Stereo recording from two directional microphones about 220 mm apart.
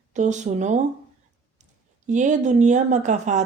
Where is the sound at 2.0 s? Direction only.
35° right (ahead or behind).